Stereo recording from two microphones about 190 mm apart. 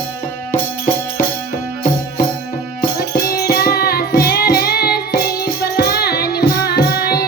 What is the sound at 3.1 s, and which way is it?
Music, 50° left (ahead or behind).